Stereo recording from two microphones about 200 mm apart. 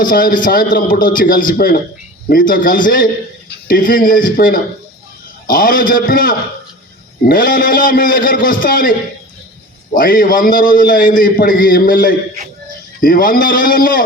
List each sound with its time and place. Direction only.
0.0 s a man's voice: 45° left (ahead or behind)